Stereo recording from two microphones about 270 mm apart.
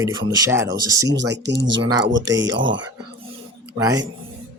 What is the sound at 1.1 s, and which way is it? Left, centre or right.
Speech, right.